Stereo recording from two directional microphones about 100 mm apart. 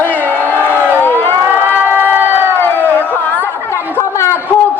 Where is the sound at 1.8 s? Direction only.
20° right (ahead or behind).